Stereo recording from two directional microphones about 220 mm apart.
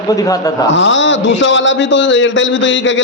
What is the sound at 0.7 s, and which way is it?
A man's voice, 55° left (ahead or behind).